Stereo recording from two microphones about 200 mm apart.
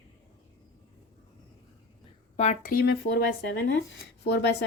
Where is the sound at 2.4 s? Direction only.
40° left (ahead or behind).